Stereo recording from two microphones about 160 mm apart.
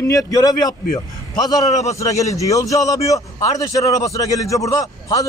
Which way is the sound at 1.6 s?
45° left (ahead or behind).